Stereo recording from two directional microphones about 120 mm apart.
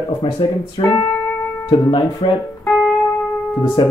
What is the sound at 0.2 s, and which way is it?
Speech, 40° left (ahead or behind).